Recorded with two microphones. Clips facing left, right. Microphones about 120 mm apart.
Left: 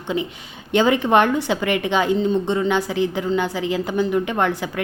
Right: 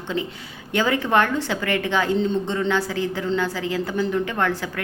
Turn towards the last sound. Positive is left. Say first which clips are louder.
# left 3 dB
turn(degrees=20)  # may be behind; listen again after turning